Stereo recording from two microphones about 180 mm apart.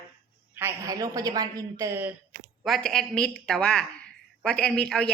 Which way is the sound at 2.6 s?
Centre (ahead or behind).